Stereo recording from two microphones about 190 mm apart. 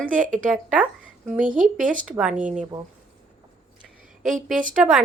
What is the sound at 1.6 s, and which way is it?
Speech, 45° right (ahead or behind).